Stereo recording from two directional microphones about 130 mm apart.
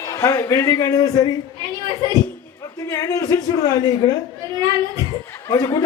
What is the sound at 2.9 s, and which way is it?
A woman's voice, 25° left (ahead or behind).